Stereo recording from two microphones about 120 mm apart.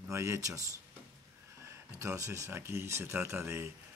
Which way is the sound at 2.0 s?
25° right (ahead or behind).